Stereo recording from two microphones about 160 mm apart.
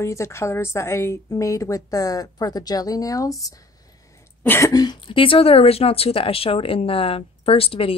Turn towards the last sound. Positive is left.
turn(degrees=35)  # may be behind; listen again after turning